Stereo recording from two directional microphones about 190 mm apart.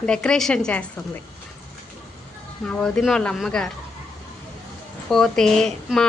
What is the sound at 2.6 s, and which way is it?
Speech, 5° left (ahead or behind).